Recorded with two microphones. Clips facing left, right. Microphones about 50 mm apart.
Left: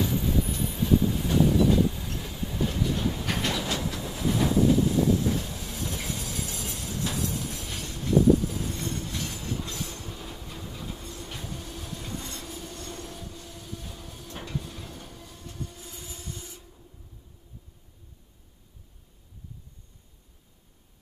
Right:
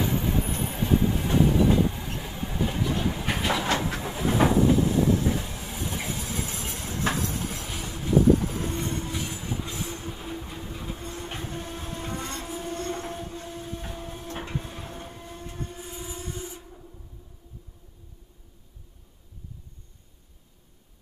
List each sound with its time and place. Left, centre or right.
0.0 s train: right; by 2.9 s centre
3.1 s vehicle: right
3.6 s train: right
5.2 s train: centre; by 7.6 s right
7.6 s train: centre
8.4 s train: right
9.1 s train: centre